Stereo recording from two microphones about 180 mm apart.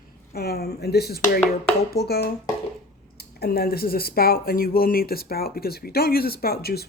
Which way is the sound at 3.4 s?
55° left (ahead or behind).